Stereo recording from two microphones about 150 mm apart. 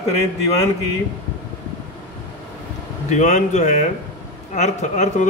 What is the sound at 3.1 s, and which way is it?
A man's voice, 55° left (ahead or behind).